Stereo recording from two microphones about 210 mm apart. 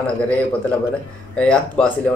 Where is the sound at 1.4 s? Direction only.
5° left (ahead or behind).